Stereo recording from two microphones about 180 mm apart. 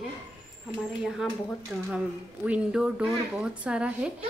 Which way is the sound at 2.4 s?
5° right (ahead or behind).